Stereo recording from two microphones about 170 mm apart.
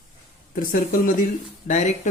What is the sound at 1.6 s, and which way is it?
Speech, 45° left (ahead or behind).